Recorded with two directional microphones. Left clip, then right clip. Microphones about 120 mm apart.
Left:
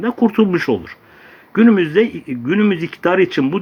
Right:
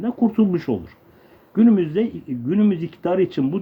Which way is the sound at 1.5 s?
35° right (ahead or behind).